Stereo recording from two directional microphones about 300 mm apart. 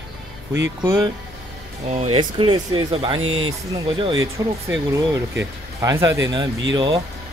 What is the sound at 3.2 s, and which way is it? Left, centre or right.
Speech, right.